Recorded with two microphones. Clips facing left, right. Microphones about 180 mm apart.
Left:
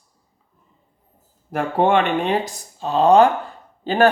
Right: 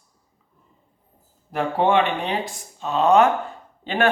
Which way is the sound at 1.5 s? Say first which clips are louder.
Left 2 dB; 50° left (ahead or behind).